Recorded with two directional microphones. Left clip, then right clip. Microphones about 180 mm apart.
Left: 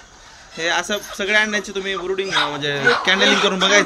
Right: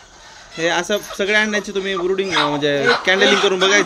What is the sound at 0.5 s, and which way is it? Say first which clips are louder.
A man's voice: right 2 dB; centre (ahead or behind).